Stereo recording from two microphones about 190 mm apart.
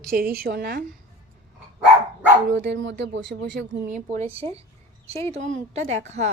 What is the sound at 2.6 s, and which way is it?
Speech, 70° right (ahead or behind).